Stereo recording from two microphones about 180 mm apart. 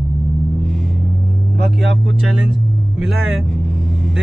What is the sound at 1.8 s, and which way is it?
Speech, 90° right.